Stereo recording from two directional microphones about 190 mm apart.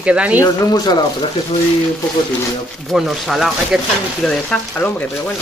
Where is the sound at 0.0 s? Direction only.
5° right (ahead or behind).